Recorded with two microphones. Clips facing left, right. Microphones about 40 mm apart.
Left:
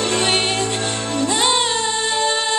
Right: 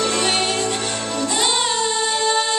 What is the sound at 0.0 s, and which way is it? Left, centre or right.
Music, left.